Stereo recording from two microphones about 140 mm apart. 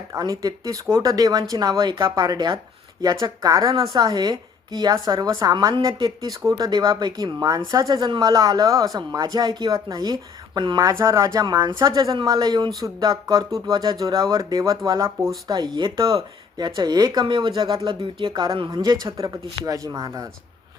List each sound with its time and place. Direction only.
0.1 s a woman's voice: 25° right (ahead or behind)